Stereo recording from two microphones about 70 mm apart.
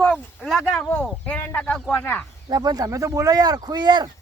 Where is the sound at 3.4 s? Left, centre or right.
Right.